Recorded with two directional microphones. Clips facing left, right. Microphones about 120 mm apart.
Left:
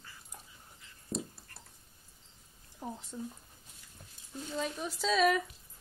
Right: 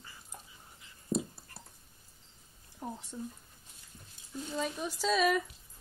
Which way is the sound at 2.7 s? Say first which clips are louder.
Right 1 dB; 5° right (ahead or behind).